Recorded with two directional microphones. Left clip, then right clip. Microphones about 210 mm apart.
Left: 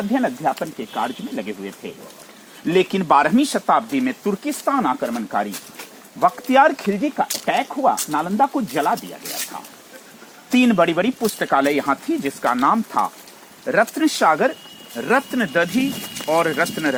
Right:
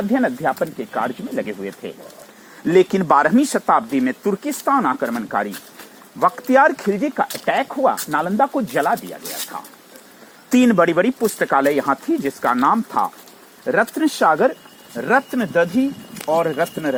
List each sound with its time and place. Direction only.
0.1 s speech: 50° right (ahead or behind)
7.4 s speech: 50° right (ahead or behind)
10.5 s speech: 40° right (ahead or behind)